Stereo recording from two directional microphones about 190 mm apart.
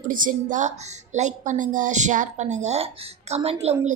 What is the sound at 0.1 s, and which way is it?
Speech, 45° right (ahead or behind).